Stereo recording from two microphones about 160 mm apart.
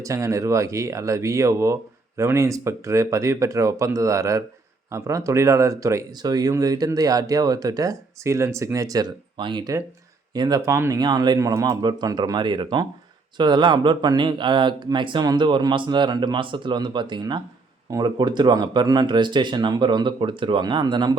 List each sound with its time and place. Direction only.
0.0 s speech: 20° right (ahead or behind)
10.7 s speech: 15° right (ahead or behind)